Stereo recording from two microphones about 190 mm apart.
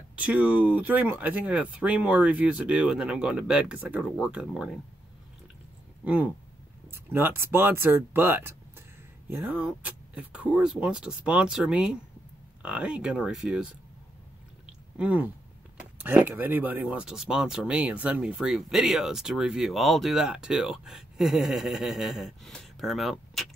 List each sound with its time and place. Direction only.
0.1 s speech: 5° right (ahead or behind)
6.0 s speech: 10° right (ahead or behind)
14.7 s a sound: 5° right (ahead or behind)
16.0 s speech: 10° right (ahead or behind)